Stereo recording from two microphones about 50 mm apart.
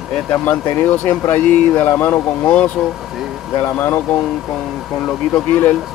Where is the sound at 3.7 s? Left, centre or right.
Left.